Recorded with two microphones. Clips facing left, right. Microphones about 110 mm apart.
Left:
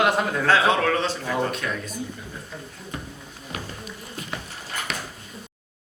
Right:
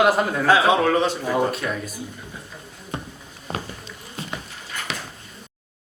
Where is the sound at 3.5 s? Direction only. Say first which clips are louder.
Right 4 dB; 30° right (ahead or behind).